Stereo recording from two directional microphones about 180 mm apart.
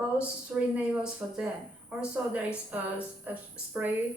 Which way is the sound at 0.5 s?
5° right (ahead or behind).